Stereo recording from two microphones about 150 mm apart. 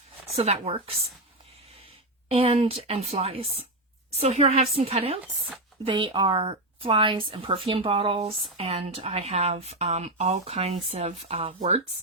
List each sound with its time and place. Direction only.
0.3 s speech: 45° right (ahead or behind)
2.3 s speech: 40° right (ahead or behind)